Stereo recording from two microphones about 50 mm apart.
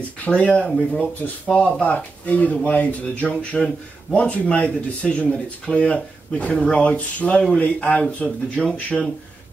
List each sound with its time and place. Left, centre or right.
0.2 s speech: left
1.5 s speech: centre
1.8 s speech: left